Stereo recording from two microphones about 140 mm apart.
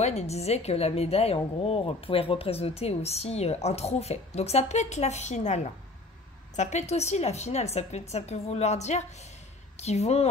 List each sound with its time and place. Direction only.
0.0 s a woman's voice: 50° left (ahead or behind)